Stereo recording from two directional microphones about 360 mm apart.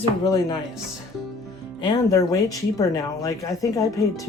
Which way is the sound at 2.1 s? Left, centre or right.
Centre.